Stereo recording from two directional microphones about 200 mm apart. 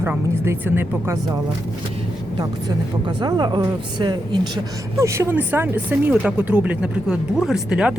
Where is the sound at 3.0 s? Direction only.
20° right (ahead or behind); by 8.0 s 5° right (ahead or behind).